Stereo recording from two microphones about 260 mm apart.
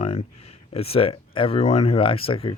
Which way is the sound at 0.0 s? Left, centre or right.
Left.